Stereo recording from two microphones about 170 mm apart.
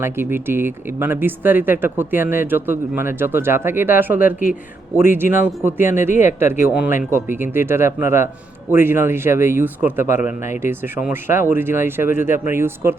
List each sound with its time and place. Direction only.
0.0 s speech: 15° right (ahead or behind)